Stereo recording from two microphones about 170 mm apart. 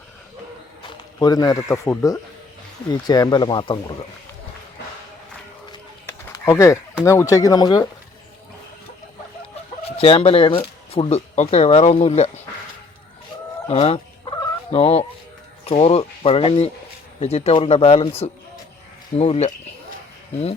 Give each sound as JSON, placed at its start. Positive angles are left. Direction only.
{"t": 0.8, "sound": "speech", "side_deg": 20}
{"t": 6.1, "sound": "bird", "side_deg": 15}
{"t": 7.0, "sound": "speech", "side_deg": 15}
{"t": 10.0, "sound": "speech", "side_deg": 35}
{"t": 13.7, "sound": "fowl", "side_deg": 35}
{"t": 15.6, "sound": "speech", "side_deg": 35}